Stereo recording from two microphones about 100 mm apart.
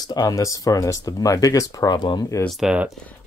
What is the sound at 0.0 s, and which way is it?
Speech, 40° left (ahead or behind).